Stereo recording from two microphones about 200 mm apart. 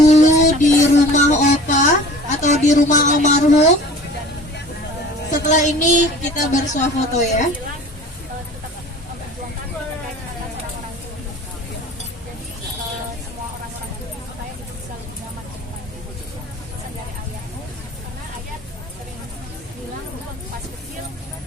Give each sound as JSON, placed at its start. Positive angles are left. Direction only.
{"t": 0.0, "sound": "music", "side_deg": 35}
{"t": 2.4, "sound": "speech", "side_deg": 35}
{"t": 5.3, "sound": "speech", "side_deg": 40}